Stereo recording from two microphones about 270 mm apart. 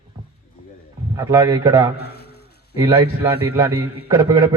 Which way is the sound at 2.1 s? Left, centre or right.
Left.